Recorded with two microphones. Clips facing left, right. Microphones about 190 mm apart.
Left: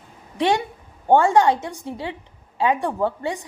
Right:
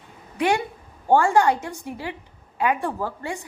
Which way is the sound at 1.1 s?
20° left (ahead or behind).